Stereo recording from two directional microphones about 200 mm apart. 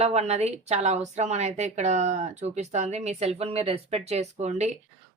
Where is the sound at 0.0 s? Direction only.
35° right (ahead or behind).